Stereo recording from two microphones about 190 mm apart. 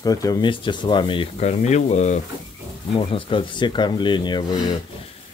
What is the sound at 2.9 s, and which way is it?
Speech, 25° left (ahead or behind).